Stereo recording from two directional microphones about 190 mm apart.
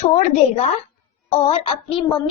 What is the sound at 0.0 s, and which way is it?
Child singing, 35° left (ahead or behind).